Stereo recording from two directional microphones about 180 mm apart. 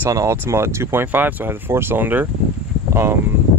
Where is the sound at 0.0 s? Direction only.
15° right (ahead or behind).